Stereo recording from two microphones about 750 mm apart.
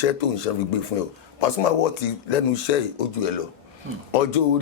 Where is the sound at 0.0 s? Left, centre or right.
Left.